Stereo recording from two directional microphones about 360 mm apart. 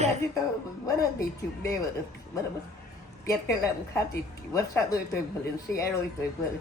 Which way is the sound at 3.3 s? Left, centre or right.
Centre.